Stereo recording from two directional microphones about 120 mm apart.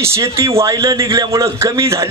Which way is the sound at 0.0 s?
25° right (ahead or behind).